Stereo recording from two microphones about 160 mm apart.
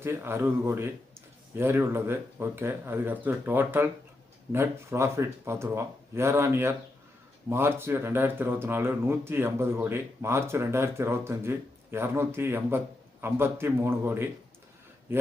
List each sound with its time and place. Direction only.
0.0 s a man's voice: 15° right (ahead or behind)